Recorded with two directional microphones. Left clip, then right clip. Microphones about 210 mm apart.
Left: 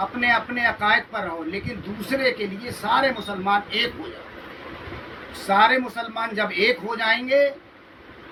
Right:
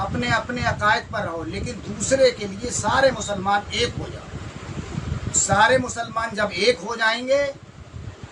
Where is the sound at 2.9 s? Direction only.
20° right (ahead or behind).